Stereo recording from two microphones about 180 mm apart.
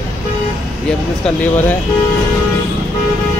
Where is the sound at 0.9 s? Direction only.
5° left (ahead or behind).